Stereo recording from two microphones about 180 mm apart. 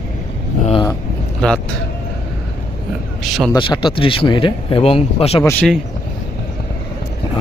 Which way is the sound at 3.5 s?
25° left (ahead or behind).